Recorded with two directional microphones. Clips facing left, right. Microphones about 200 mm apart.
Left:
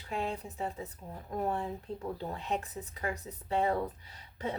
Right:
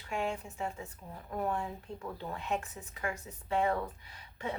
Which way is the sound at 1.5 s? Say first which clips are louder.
Left 1 dB; 35° left (ahead or behind).